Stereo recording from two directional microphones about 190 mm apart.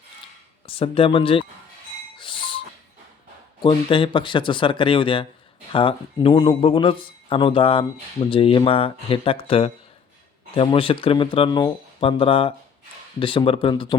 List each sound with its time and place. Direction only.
0.7 s speech: 30° left (ahead or behind)
2.1 s doorbell: 25° left (ahead or behind)
3.6 s speech: 25° left (ahead or behind)